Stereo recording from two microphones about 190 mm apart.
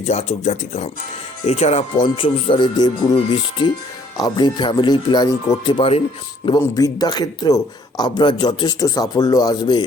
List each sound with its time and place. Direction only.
0.0 s speech: 35° left (ahead or behind)
6.6 s speech: 20° left (ahead or behind)